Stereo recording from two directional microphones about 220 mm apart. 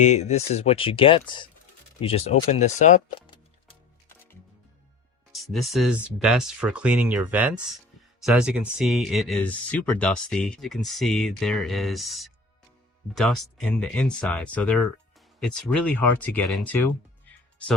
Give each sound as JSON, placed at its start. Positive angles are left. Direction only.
{"t": 0.0, "sound": "speech", "side_deg": 30}
{"t": 5.3, "sound": "speech", "side_deg": 0}